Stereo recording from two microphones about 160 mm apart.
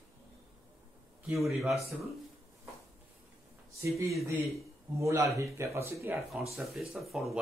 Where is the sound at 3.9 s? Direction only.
20° right (ahead or behind).